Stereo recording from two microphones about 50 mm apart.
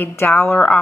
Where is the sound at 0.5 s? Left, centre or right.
Left.